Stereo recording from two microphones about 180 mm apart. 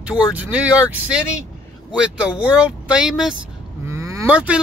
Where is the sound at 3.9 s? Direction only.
15° right (ahead or behind).